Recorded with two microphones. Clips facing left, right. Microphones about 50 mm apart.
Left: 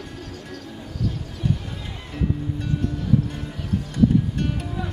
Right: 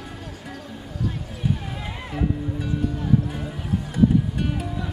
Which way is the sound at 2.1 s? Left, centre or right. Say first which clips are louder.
Even; centre.